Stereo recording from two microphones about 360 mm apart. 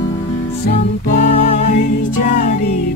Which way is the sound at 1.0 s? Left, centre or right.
Left.